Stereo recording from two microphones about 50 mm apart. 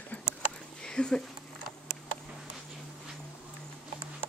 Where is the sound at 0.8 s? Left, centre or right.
Centre.